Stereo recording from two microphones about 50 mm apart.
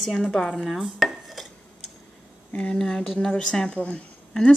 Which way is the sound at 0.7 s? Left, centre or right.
Centre.